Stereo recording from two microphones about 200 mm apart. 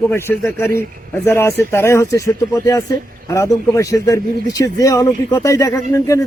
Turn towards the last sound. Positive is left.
turn(degrees=15)  # may be behind; listen again after turning